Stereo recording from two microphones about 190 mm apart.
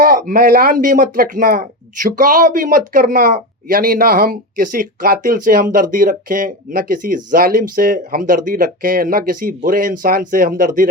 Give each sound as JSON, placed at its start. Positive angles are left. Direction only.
{"t": 0.0, "sound": "speech", "side_deg": -50}